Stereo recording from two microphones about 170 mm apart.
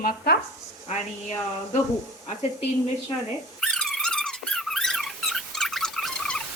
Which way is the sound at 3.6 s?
Centre (ahead or behind).